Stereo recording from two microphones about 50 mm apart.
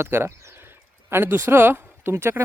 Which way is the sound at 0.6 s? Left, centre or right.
Right.